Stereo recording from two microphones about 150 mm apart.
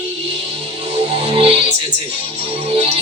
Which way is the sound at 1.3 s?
40° right (ahead or behind).